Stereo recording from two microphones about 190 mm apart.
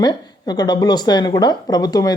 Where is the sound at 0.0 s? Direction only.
20° left (ahead or behind).